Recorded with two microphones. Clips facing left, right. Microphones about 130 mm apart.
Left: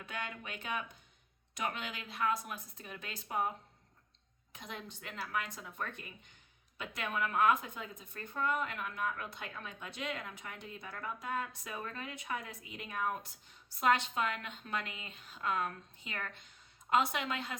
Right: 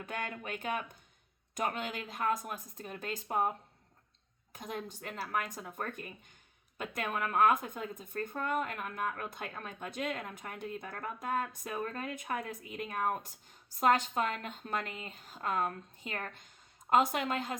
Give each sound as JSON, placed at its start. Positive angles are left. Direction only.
{"t": 0.0, "sound": "speech", "side_deg": -45}
{"t": 4.5, "sound": "speech", "side_deg": -45}